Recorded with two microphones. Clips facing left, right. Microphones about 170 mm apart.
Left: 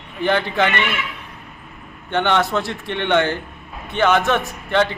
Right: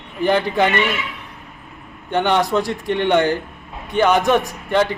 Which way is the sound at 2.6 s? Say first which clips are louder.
Right 5 dB; 40° right (ahead or behind).